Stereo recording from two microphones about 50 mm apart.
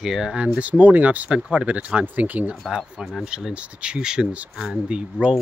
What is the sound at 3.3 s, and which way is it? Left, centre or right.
Speech, centre.